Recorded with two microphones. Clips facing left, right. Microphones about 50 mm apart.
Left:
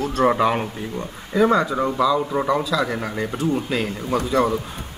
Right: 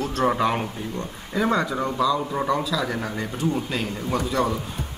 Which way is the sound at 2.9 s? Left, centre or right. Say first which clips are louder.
Left 3 dB; centre.